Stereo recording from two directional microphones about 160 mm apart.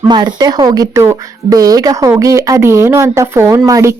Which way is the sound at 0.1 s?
30° right (ahead or behind).